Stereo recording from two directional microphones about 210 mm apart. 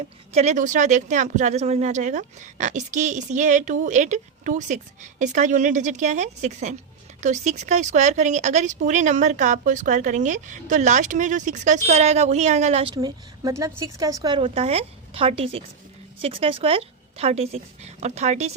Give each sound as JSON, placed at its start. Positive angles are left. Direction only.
{"t": 0.3, "sound": "a woman's voice", "side_deg": -35}